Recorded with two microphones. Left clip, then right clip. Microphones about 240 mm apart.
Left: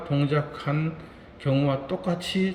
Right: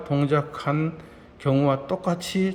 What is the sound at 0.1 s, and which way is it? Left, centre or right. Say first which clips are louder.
A man's voice: right 3 dB; centre.